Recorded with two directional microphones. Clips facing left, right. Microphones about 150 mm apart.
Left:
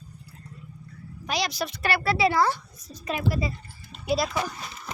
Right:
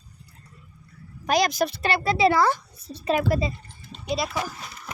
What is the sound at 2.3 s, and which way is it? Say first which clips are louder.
Speech: right 3 dB; 85° right.